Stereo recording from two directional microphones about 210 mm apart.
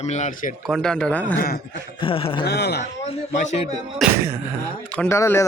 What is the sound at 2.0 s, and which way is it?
Speech, 25° left (ahead or behind).